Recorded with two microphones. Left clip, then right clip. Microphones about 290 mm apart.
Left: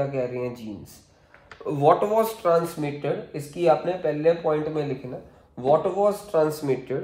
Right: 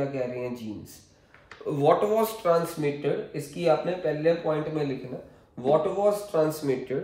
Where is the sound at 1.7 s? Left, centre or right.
Centre.